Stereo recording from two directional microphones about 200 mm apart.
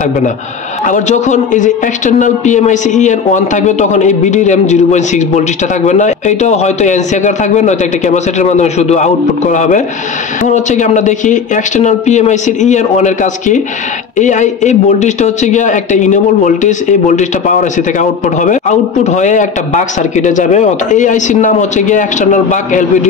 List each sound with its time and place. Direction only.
0.8 s speech: 35° left (ahead or behind)